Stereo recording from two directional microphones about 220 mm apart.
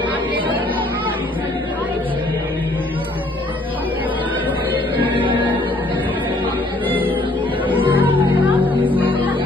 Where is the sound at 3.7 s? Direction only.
5° right (ahead or behind).